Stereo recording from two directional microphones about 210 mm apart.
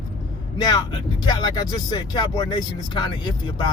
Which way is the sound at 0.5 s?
20° left (ahead or behind).